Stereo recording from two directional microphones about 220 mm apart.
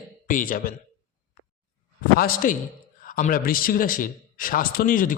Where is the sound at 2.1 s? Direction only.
40° left (ahead or behind).